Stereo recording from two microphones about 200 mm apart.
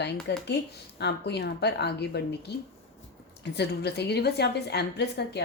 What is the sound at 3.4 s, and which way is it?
A woman's voice, 55° left (ahead or behind).